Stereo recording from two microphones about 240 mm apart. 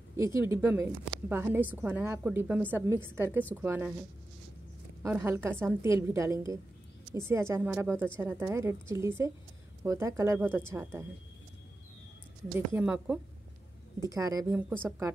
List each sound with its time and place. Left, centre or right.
0.1 s a woman's voice: centre
5.0 s a woman's voice: centre
12.5 s a woman's voice: centre